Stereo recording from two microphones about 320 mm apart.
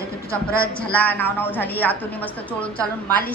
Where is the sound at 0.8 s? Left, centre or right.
Centre.